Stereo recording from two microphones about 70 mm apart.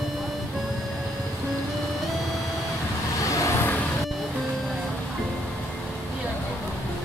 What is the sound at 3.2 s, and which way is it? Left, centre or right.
Vehicle, left.